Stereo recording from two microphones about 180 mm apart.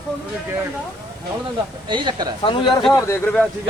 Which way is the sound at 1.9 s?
25° right (ahead or behind).